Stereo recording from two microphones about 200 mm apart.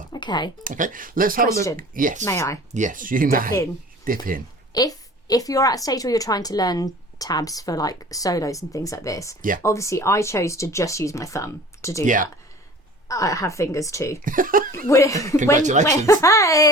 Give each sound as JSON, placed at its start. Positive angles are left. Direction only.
{"t": 0.1, "sound": "a sound", "side_deg": 20}
{"t": 0.6, "sound": "speech", "side_deg": -40}
{"t": 2.2, "sound": "a woman's voice", "side_deg": 15}
{"t": 2.7, "sound": "speech", "side_deg": -40}
{"t": 4.7, "sound": "a woman's voice", "side_deg": 20}
{"t": 12.0, "sound": "speech", "side_deg": -40}
{"t": 13.1, "sound": "a woman's voice", "side_deg": 15}
{"t": 14.3, "sound": "speech", "side_deg": -45}
{"t": 14.8, "sound": "a woman's voice", "side_deg": 15}
{"t": 15.5, "sound": "speech", "side_deg": -40}
{"t": 16.0, "sound": "a woman's voice", "side_deg": 15}